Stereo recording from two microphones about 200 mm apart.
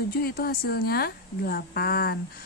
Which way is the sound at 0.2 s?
50° left (ahead or behind).